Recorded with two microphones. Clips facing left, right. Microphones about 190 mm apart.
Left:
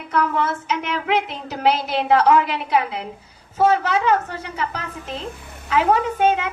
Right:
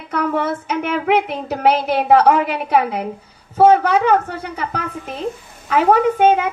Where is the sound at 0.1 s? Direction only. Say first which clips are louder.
Right 2 dB; 55° right (ahead or behind).